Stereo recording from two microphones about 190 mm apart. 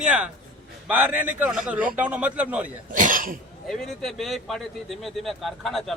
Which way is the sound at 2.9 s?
45° right (ahead or behind).